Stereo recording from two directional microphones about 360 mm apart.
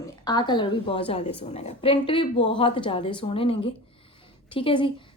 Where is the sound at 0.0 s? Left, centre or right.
Centre.